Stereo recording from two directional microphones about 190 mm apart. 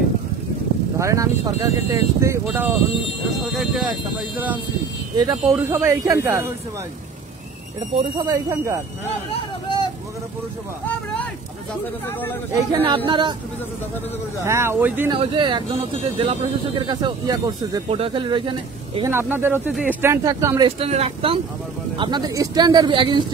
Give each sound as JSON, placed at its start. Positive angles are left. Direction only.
{"t": 0.9, "sound": "speech", "side_deg": -15}
{"t": 5.1, "sound": "speech", "side_deg": -15}
{"t": 7.9, "sound": "speech", "side_deg": -25}
{"t": 9.3, "sound": "a sound", "side_deg": 25}
{"t": 12.8, "sound": "speech", "side_deg": -25}
{"t": 14.4, "sound": "speech", "side_deg": -15}
{"t": 15.0, "sound": "speech", "side_deg": -25}
{"t": 17.8, "sound": "speech", "side_deg": -30}
{"t": 19.0, "sound": "speech", "side_deg": -10}
{"t": 20.6, "sound": "speech", "side_deg": -30}